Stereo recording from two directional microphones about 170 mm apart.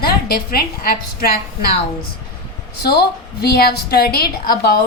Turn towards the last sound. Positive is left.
turn(degrees=65)  # may be behind; listen again after turning